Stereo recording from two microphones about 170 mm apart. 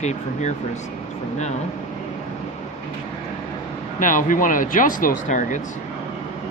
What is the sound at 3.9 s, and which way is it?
Speech, 50° left (ahead or behind).